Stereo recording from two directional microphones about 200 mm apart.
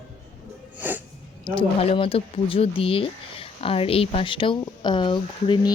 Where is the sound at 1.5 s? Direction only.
25° left (ahead or behind).